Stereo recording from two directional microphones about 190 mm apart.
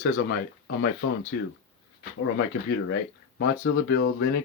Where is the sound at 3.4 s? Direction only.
70° left (ahead or behind).